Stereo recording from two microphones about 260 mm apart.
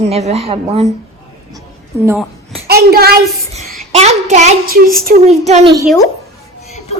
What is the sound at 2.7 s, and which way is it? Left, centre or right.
Speech, right.